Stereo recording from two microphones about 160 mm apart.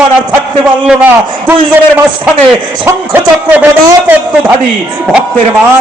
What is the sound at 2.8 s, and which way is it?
A man's voice, 10° right (ahead or behind).